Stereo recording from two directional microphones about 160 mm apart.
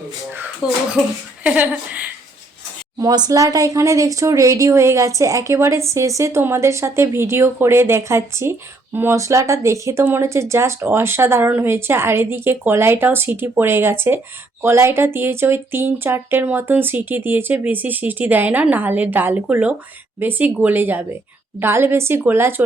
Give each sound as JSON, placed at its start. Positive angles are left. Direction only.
{"t": 0.3, "sound": "a sound", "side_deg": -10}
{"t": 1.5, "sound": "speech", "side_deg": -10}
{"t": 3.0, "sound": "speech", "side_deg": -25}